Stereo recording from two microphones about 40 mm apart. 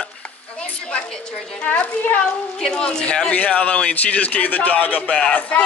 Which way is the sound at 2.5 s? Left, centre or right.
Left.